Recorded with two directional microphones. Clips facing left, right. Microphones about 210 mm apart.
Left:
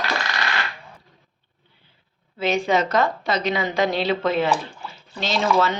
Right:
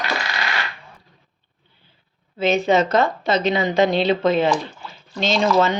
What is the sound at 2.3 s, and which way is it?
A woman's voice, 20° right (ahead or behind).